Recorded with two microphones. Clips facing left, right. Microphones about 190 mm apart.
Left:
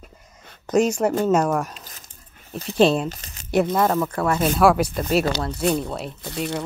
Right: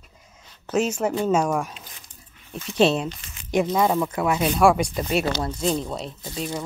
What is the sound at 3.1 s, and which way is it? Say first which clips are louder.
Speech: left 2 dB; 40° left (ahead or behind).